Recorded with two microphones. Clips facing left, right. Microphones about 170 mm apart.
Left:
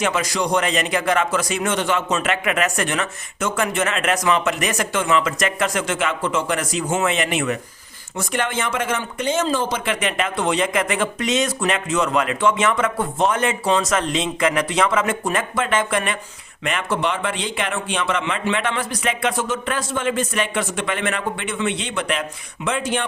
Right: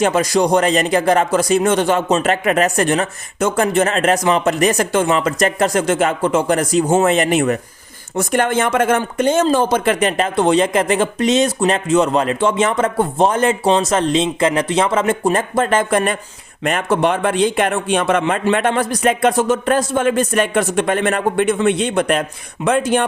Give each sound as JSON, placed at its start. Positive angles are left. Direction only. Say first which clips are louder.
{"t": 0.0, "sound": "a man's voice", "louder": "right 7 dB", "side_deg": -35}